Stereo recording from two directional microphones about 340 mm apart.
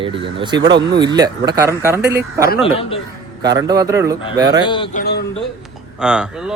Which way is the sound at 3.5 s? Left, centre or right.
Centre.